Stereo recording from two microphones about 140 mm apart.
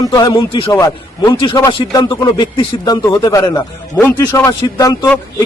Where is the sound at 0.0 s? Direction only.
25° left (ahead or behind).